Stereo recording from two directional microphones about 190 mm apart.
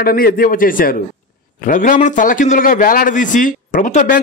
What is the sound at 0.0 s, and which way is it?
A man's voice, 50° left (ahead or behind).